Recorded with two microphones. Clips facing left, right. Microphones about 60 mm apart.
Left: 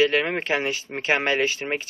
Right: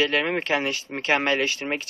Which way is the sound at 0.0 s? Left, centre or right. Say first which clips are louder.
Left 2 dB; centre.